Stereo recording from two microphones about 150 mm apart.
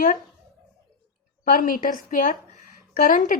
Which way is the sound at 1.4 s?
65° left (ahead or behind).